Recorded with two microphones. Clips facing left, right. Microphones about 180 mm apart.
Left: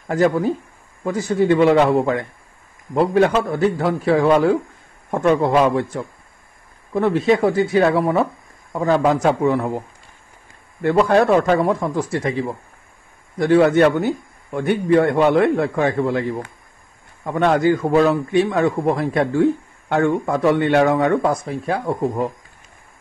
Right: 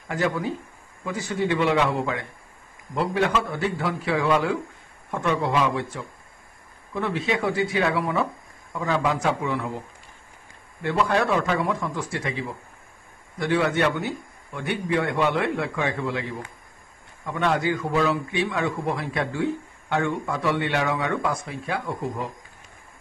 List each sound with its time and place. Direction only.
0.1 s a man's voice: 45° left (ahead or behind)